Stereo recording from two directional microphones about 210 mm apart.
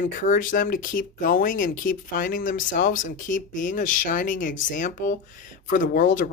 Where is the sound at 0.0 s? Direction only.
40° left (ahead or behind).